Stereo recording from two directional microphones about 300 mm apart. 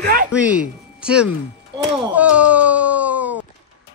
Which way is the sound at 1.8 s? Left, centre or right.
Centre.